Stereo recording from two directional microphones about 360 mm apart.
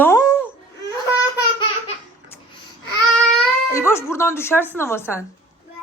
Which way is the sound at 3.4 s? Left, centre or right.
Centre.